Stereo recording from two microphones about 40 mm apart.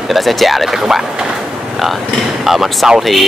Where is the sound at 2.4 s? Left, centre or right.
Centre.